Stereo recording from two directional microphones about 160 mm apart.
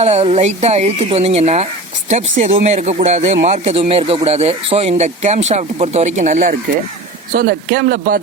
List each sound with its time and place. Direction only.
0.0 s speech: 40° right (ahead or behind); by 8.2 s 65° right (ahead or behind)